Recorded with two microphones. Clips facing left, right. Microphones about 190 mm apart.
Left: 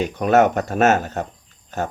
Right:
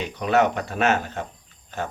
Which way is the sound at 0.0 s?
45° left (ahead or behind).